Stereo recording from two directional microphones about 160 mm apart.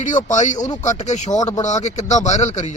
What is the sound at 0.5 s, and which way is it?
Speech, 25° left (ahead or behind).